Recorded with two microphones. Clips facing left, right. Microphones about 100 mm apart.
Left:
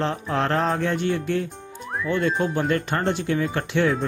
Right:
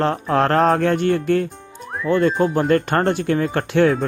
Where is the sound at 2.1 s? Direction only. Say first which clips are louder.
Right 6 dB; 40° right (ahead or behind).